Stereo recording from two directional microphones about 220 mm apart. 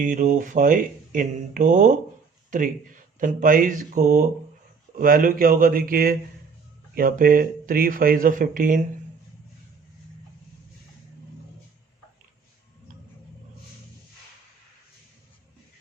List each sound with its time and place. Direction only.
0.0 s speech: 35° right (ahead or behind)